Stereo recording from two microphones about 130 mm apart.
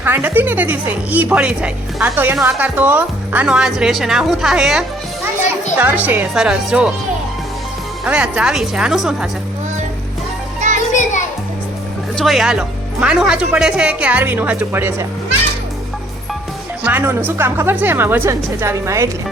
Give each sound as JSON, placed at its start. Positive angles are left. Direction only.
{"t": 0.0, "sound": "a woman's voice", "side_deg": -15}
{"t": 8.0, "sound": "speech", "side_deg": -10}
{"t": 10.6, "sound": "children playing", "side_deg": -65}
{"t": 12.1, "sound": "a woman's voice", "side_deg": 0}
{"t": 16.8, "sound": "a woman's voice", "side_deg": -15}